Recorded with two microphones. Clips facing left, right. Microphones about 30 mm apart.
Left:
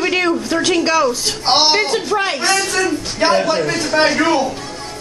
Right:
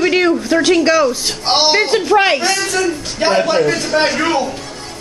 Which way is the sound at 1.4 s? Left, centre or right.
Centre.